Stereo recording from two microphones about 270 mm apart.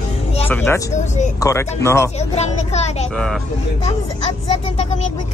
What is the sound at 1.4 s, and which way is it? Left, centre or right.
Speech, centre.